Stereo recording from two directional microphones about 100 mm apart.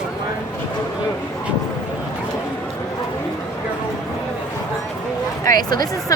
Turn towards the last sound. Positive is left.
turn(degrees=45)  # may be behind; listen again after turning